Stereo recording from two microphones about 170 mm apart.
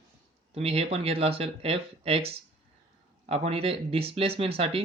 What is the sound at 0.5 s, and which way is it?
Speech, 35° right (ahead or behind).